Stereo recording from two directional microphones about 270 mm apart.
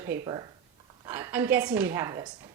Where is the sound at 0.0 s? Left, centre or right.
Centre.